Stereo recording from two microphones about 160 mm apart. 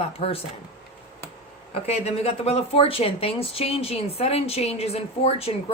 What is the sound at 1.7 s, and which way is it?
Speech, 40° left (ahead or behind).